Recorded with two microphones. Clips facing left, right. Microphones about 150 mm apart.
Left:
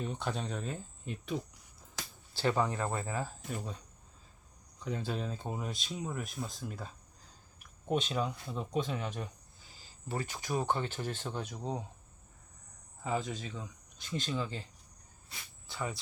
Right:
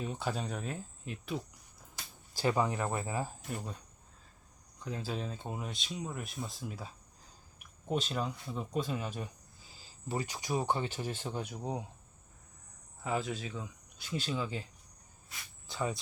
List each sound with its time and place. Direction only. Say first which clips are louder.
0.0 s speech: even; 5° right (ahead or behind)
4.8 s speech: left 2 dB; centre (ahead or behind)
13.0 s speech: even; 5° right (ahead or behind)
15.6 s speech: right 3 dB; 20° right (ahead or behind)